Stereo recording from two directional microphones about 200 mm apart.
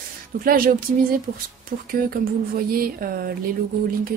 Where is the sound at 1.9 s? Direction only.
50° right (ahead or behind).